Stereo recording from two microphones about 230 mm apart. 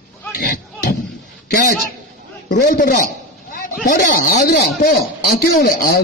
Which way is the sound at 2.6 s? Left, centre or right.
Left.